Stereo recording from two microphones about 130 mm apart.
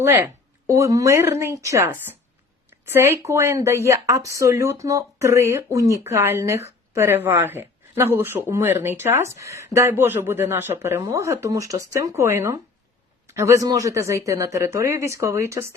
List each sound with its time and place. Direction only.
0.0 s a man's voice: 15° right (ahead or behind)